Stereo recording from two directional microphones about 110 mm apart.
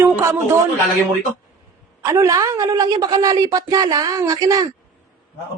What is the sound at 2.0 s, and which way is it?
A woman's voice, 25° right (ahead or behind).